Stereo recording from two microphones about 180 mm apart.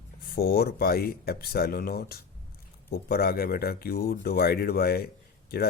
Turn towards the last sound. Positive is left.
turn(degrees=60)  # may be behind; listen again after turning